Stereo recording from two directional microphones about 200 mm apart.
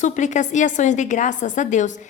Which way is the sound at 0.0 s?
35° left (ahead or behind).